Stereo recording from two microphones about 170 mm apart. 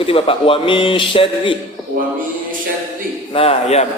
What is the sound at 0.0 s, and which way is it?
A man's voice, 35° left (ahead or behind).